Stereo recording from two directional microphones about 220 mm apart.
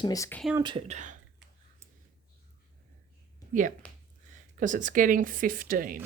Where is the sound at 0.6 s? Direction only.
25° right (ahead or behind).